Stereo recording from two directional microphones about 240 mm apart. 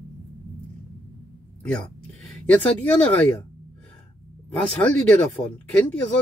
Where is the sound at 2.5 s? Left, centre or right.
Centre.